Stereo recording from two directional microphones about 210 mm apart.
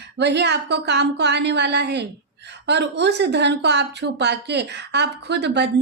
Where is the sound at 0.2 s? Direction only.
55° right (ahead or behind).